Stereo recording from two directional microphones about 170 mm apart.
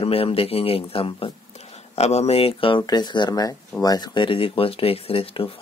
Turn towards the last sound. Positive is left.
turn(degrees=35)  # may be behind; listen again after turning